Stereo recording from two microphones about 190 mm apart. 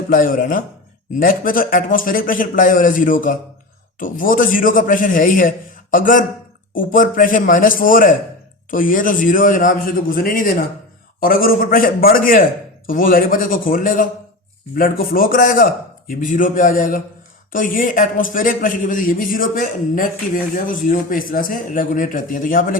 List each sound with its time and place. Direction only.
0.1 s a man's voice: 45° left (ahead or behind)